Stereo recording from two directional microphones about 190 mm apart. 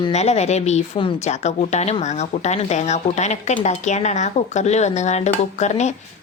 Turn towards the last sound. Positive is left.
turn(degrees=35)  # may be behind; listen again after turning